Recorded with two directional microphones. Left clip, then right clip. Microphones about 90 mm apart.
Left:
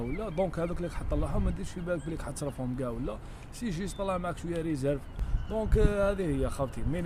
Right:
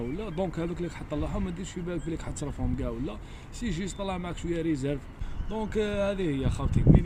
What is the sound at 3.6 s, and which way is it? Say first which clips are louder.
Speech: right 1 dB; 80° left.